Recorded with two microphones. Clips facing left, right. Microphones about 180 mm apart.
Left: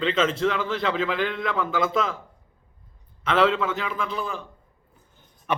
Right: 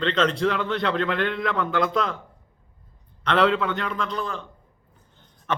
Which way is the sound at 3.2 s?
Centre (ahead or behind).